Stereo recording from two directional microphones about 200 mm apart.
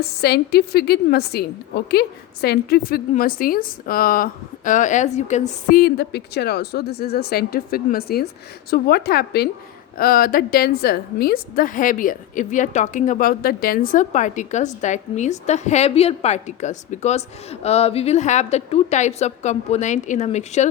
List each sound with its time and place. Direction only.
0.0 s a woman's voice: 55° left (ahead or behind); by 20.7 s 35° left (ahead or behind)